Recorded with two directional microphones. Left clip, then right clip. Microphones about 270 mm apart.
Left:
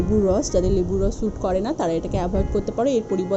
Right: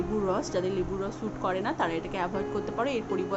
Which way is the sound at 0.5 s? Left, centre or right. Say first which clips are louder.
Left 8 dB; centre.